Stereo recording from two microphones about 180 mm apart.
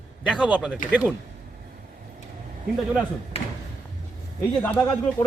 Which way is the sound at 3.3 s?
30° left (ahead or behind).